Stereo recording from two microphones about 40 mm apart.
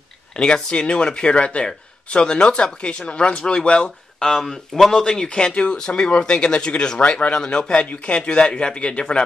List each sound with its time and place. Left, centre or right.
0.4 s speech: left
4.2 s speech: centre
5.0 s speech: centre; by 7.3 s left
7.3 s speech: left